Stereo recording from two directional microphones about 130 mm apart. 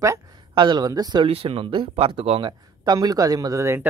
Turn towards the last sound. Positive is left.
turn(degrees=-20)  # may be behind; listen again after turning